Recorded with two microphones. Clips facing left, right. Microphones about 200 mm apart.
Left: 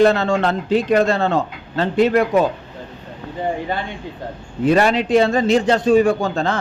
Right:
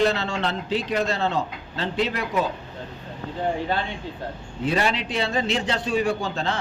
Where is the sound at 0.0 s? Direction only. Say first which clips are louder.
Left 8 dB; 50° left (ahead or behind).